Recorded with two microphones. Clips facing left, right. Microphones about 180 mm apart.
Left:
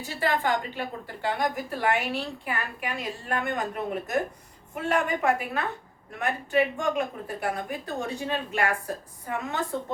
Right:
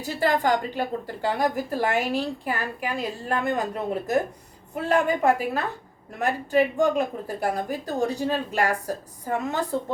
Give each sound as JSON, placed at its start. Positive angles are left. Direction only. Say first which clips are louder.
{"t": 0.0, "sound": "a woman's voice", "louder": "right 4 dB", "side_deg": -40}